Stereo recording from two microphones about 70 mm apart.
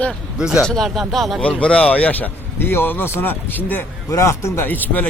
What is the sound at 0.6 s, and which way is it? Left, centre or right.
Speech, centre.